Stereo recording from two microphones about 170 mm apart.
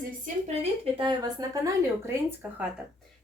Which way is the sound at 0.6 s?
30° right (ahead or behind).